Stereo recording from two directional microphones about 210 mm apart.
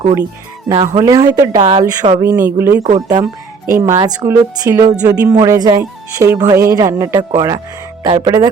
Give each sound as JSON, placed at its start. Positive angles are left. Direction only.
{"t": 0.0, "sound": "speech", "side_deg": -15}
{"t": 2.8, "sound": "speech", "side_deg": -35}
{"t": 3.7, "sound": "speech", "side_deg": -15}